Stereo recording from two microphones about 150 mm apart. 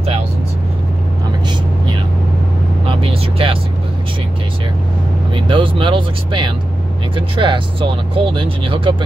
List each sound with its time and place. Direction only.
2.9 s vehicle: 40° right (ahead or behind)
5.3 s speech: 35° right (ahead or behind)